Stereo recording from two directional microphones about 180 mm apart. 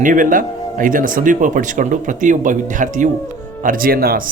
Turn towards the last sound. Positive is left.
turn(degrees=-55)  # may be behind; listen again after turning